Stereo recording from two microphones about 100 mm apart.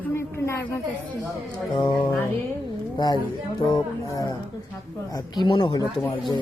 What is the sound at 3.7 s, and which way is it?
A man's voice, 40° left (ahead or behind).